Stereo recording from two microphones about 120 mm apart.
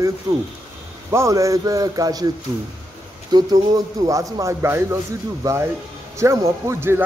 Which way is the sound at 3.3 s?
30° right (ahead or behind).